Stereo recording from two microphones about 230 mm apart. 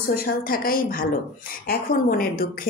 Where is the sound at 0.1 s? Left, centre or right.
Left.